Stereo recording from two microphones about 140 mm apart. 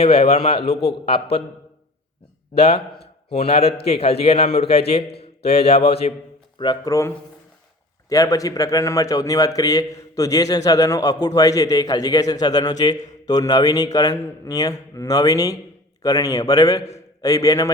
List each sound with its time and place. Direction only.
0.0 s a man's voice: 45° left (ahead or behind)
2.6 s a man's voice: 45° left (ahead or behind)
6.6 s a man's voice: 30° left (ahead or behind)
8.1 s a man's voice: 25° left (ahead or behind)